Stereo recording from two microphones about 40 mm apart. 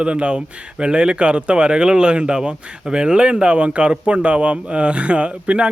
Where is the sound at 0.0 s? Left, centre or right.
Right.